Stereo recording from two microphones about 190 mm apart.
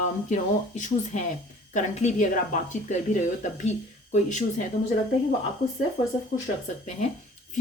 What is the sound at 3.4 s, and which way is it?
Speech, 40° left (ahead or behind).